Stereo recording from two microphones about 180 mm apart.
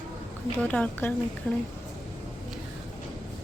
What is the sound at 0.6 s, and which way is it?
A woman's voice, 10° left (ahead or behind).